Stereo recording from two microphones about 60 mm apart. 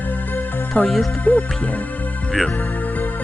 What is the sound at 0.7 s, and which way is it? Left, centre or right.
Speech, left.